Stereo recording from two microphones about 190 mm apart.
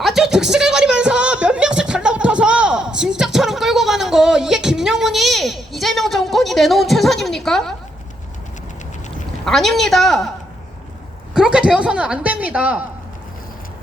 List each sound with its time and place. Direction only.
0.0 s a sound: centre (ahead or behind)
9.5 s a woman's voice: centre (ahead or behind)
11.3 s a woman's voice: 5° right (ahead or behind)